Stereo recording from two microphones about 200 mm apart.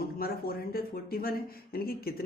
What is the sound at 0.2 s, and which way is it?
Speech, 50° left (ahead or behind).